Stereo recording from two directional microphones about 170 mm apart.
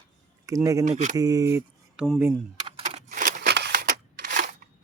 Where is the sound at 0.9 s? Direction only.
40° right (ahead or behind).